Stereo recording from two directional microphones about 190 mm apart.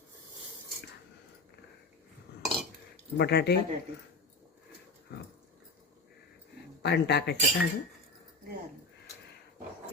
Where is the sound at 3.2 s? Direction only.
60° left (ahead or behind).